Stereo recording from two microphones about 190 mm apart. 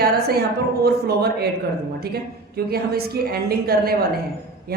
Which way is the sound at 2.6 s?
55° right (ahead or behind).